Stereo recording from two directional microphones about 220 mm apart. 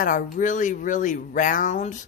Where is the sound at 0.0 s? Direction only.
35° left (ahead or behind).